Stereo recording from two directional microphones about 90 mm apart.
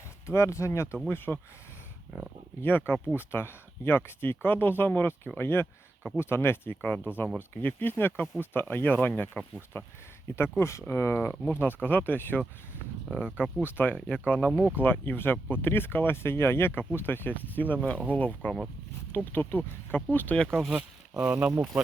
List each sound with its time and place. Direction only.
0.3 s speech: 30° left (ahead or behind)
2.6 s speech: 20° left (ahead or behind); by 20.7 s 5° left (ahead or behind)
20.7 s speech: 10° right (ahead or behind)